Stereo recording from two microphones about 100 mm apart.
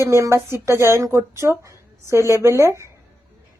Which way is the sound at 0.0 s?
30° right (ahead or behind).